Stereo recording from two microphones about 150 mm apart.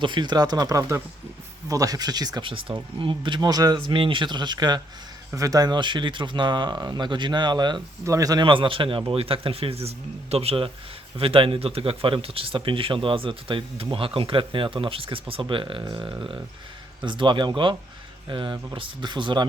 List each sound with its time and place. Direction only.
0.0 s speech: 30° right (ahead or behind)